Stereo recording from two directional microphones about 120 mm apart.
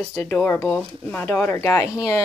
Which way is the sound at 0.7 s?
10° left (ahead or behind).